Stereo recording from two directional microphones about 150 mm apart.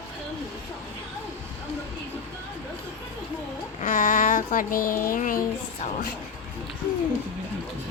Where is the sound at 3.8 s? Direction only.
60° left (ahead or behind).